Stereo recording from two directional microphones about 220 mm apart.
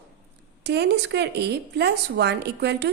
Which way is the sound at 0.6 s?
50° right (ahead or behind).